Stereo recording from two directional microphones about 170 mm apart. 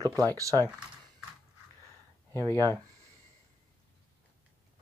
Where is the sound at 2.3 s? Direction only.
15° left (ahead or behind).